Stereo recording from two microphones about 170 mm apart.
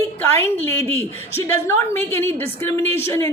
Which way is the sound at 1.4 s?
15° left (ahead or behind).